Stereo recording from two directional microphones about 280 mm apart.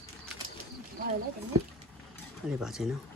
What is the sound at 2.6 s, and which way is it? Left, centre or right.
Speech, centre.